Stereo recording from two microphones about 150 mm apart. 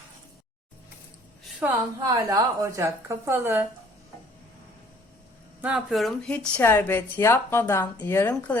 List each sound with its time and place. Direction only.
1.6 s a woman's voice: 10° right (ahead or behind)
2.1 s a woman's voice: 25° right (ahead or behind)
5.6 s speech: 5° right (ahead or behind); by 8.5 s 15° left (ahead or behind)